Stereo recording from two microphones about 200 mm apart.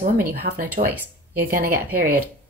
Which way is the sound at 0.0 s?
45° right (ahead or behind).